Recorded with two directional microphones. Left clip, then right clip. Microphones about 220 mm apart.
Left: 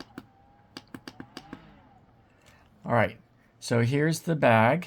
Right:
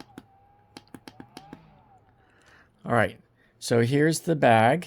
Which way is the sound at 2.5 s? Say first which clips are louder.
Right 1 dB; 35° right (ahead or behind).